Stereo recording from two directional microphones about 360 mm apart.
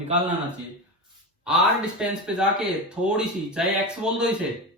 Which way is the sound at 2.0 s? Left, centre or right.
Centre.